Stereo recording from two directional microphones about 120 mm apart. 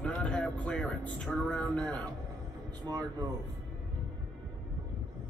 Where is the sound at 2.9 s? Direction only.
30° right (ahead or behind).